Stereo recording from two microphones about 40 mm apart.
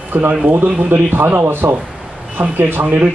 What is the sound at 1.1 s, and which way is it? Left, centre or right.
Speech, right.